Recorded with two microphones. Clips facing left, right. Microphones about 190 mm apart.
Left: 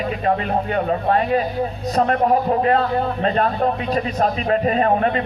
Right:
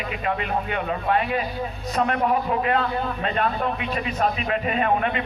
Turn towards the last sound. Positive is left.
turn(degrees=40)  # may be behind; listen again after turning